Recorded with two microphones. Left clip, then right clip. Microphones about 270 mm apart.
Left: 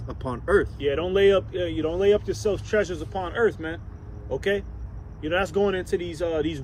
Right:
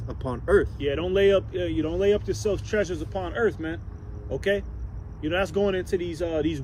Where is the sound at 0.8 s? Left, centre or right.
Centre.